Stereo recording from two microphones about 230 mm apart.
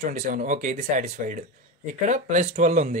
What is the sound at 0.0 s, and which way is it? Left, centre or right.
Speech, right.